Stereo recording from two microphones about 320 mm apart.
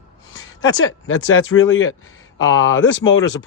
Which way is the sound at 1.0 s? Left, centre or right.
Left.